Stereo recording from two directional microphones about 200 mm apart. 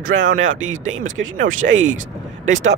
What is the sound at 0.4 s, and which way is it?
Speech, 80° right.